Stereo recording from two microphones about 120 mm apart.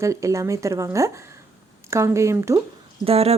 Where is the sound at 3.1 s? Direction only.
55° right (ahead or behind).